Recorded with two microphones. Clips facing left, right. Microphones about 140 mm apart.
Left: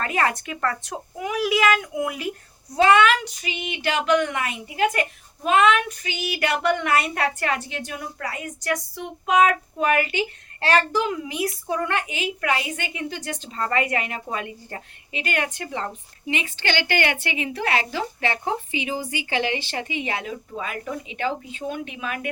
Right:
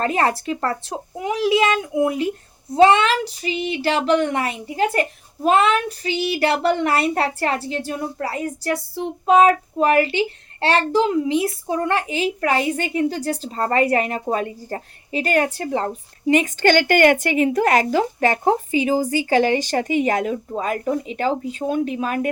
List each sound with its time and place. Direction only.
0.0 s speech: 30° right (ahead or behind)